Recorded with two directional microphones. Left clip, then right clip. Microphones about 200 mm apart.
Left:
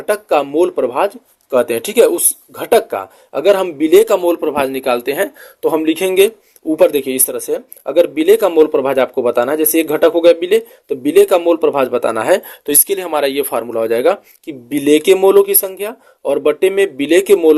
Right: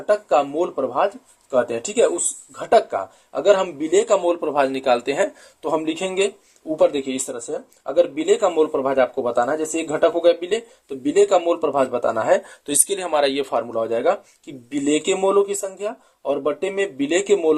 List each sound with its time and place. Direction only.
0.0 s speech: 45° left (ahead or behind)